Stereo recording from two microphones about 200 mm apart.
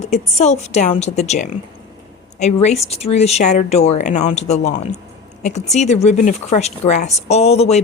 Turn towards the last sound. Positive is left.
turn(degrees=30)  # may be behind; listen again after turning